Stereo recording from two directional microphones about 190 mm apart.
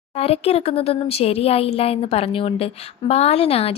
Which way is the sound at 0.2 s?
30° left (ahead or behind).